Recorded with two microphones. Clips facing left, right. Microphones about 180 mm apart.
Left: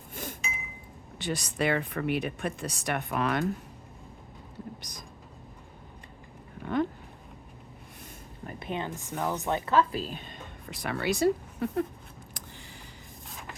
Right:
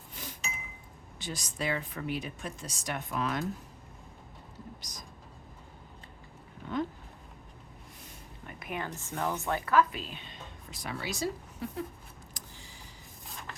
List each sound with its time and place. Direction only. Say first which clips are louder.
0.1 s chink: left 7 dB; 50° left (ahead or behind)
1.2 s speech: left 7 dB; 65° left (ahead or behind)
4.8 s vehicle: left 2 dB; 60° left (ahead or behind)
6.6 s a sound: left 5 dB; 60° left (ahead or behind)
8.4 s a sound: left 4 dB; 30° left (ahead or behind)
9.0 s speech: left 2 dB; 15° left (ahead or behind); by 11.9 s 60° left (ahead or behind)